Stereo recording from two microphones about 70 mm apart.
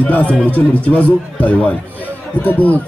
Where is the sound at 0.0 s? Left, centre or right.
Left.